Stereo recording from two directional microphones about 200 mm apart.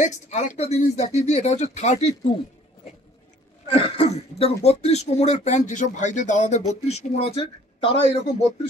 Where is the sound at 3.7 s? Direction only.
30° left (ahead or behind).